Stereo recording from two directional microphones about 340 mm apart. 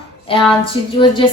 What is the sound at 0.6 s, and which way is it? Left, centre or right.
Speech, centre.